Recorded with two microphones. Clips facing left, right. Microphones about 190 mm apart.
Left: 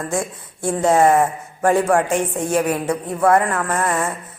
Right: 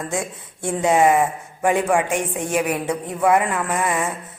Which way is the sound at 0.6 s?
15° right (ahead or behind).